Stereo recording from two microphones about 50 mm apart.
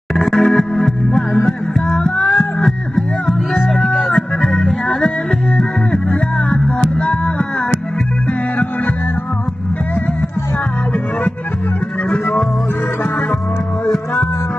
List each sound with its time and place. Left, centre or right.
0.1 s music: centre
7.0 s music: left